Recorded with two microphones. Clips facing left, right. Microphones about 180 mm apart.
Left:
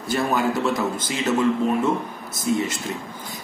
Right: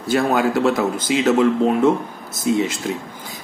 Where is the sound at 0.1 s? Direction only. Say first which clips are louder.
Right 4 dB; 85° right.